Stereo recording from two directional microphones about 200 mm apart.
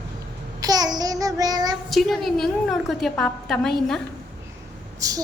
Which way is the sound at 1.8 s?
Centre (ahead or behind).